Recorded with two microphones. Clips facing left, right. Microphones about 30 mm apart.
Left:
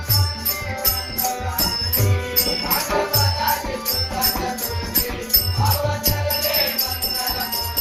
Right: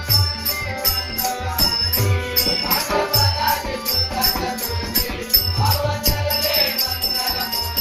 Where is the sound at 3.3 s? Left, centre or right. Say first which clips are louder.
Right 1 dB; right.